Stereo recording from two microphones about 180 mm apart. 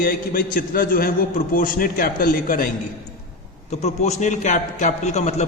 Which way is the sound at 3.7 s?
40° left (ahead or behind).